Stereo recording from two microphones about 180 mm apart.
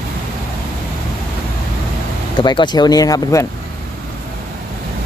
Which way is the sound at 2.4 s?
25° left (ahead or behind).